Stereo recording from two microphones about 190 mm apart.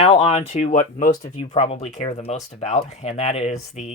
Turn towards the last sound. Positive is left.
turn(degrees=35)  # may be behind; listen again after turning